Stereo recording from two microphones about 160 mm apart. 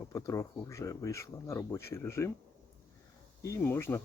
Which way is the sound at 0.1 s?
20° left (ahead or behind).